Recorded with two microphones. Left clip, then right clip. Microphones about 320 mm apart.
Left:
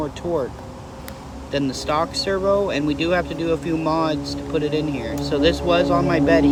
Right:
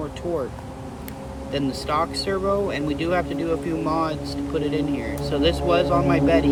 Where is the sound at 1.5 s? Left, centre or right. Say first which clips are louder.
Left 2 dB; centre.